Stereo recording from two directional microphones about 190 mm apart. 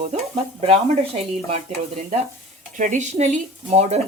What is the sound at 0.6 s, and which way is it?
Speech, 30° right (ahead or behind).